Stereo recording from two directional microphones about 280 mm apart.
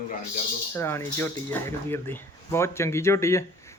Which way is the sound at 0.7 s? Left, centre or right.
Centre.